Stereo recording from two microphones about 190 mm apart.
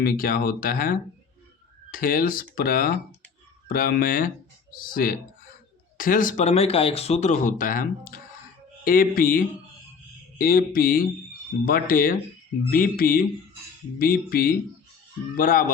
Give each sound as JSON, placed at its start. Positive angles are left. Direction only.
{"t": 0.0, "sound": "speech", "side_deg": 50}